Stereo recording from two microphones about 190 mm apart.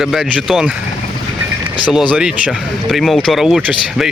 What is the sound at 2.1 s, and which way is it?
Speech, 5° right (ahead or behind).